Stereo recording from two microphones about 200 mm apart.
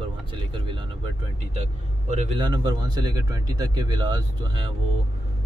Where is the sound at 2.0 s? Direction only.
35° right (ahead or behind).